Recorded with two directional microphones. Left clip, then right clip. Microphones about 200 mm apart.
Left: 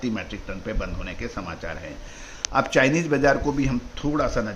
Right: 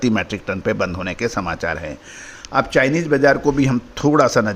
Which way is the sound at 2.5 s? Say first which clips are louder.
Right 4 dB; 20° right (ahead or behind).